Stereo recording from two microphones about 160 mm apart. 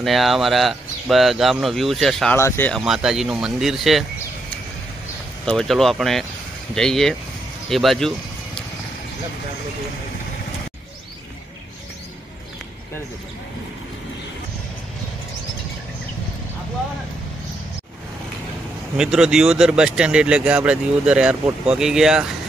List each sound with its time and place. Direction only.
0.0 s speech: centre (ahead or behind)
2.3 s speech: 15° left (ahead or behind)
2.7 s speech: 5° right (ahead or behind)
5.4 s speech: 5° left (ahead or behind)
18.9 s speech: 5° right (ahead or behind)